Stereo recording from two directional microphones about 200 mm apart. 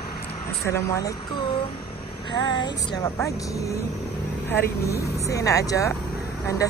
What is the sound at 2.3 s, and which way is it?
Speech, 20° left (ahead or behind).